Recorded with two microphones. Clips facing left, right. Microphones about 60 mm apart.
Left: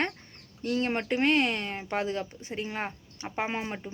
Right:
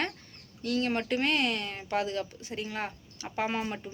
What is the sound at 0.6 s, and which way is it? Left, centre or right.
Speech, left.